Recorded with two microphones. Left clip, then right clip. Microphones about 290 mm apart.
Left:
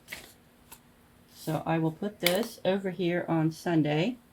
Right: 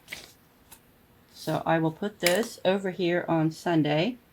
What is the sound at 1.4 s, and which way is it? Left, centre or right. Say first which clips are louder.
Speech: right 4 dB; right.